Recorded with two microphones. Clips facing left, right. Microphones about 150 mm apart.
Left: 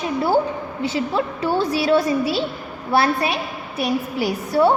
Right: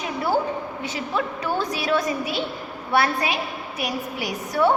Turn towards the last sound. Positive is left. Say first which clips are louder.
# left 4 dB
turn(degrees=30)  # may be behind; listen again after turning